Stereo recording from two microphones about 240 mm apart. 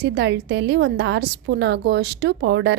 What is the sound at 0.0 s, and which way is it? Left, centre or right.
A woman's voice, right.